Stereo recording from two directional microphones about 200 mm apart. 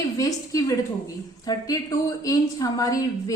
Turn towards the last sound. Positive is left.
turn(degrees=20)  # may be behind; listen again after turning